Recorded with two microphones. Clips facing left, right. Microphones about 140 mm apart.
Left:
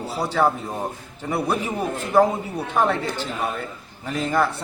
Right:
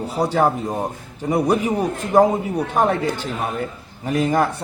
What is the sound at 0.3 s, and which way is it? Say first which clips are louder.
A man's voice: right 1 dB; 20° right (ahead or behind).